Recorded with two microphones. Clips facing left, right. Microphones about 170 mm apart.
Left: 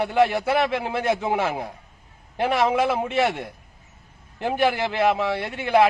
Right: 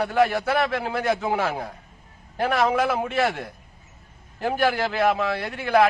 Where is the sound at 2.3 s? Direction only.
20° left (ahead or behind).